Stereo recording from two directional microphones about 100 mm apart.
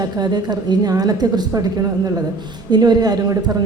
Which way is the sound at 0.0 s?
45° right (ahead or behind).